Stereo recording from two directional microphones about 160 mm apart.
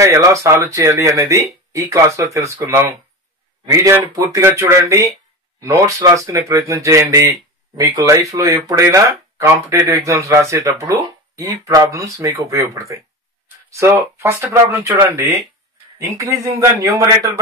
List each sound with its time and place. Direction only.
0.0 s speech: 20° right (ahead or behind)
16.5 s speech: 20° right (ahead or behind)